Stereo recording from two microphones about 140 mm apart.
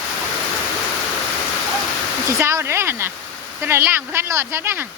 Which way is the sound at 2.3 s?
20° right (ahead or behind).